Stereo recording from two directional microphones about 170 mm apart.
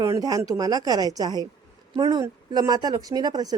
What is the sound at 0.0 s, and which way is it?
A woman's voice, 20° right (ahead or behind).